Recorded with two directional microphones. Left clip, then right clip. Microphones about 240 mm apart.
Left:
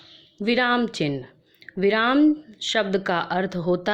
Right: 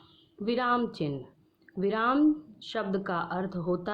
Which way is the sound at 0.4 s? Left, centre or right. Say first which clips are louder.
Left 6 dB; left.